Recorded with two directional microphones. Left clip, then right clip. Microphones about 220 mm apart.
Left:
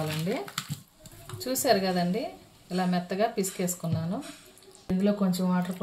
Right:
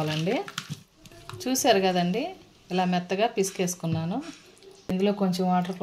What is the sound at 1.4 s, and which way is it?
Speech, 35° right (ahead or behind).